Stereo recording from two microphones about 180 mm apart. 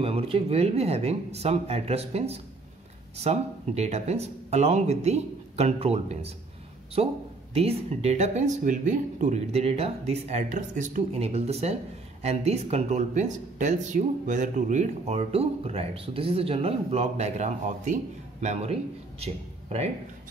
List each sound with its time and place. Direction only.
0.0 s speech: 30° right (ahead or behind)